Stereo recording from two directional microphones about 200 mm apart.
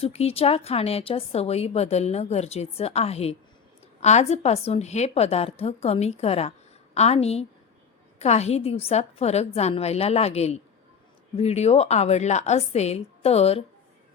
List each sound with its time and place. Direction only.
0.0 s a woman's voice: 30° left (ahead or behind)